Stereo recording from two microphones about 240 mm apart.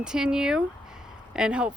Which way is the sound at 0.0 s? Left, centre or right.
Centre.